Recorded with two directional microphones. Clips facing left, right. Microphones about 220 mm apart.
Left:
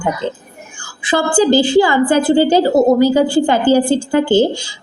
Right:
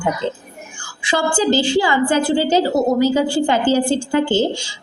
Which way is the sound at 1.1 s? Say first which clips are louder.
Left 5 dB; 50° left (ahead or behind).